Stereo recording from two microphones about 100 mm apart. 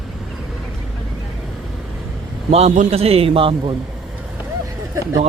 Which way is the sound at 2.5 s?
90° right.